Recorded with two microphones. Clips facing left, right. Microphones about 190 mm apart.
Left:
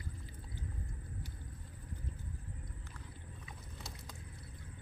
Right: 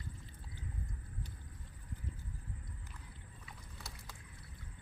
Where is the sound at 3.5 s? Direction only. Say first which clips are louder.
Left 1 dB; 20° left (ahead or behind).